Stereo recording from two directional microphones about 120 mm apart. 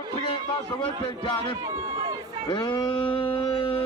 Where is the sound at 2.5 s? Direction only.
35° left (ahead or behind).